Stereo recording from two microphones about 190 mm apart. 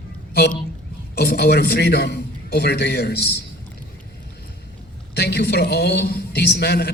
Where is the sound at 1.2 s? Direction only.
60° left (ahead or behind).